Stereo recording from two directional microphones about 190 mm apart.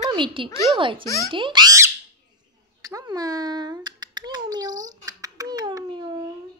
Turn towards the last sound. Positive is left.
turn(degrees=-25)  # may be behind; listen again after turning